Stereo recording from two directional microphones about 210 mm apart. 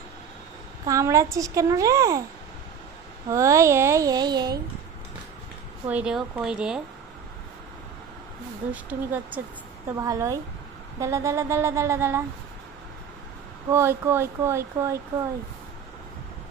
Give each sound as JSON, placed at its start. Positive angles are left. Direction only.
{"t": 0.8, "sound": "speech", "side_deg": -15}
{"t": 3.3, "sound": "speech", "side_deg": -15}
{"t": 5.9, "sound": "speech", "side_deg": -5}
{"t": 8.8, "sound": "speech", "side_deg": -5}
{"t": 13.7, "sound": "speech", "side_deg": -10}